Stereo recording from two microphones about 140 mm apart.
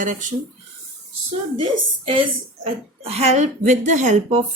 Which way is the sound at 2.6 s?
45° right (ahead or behind).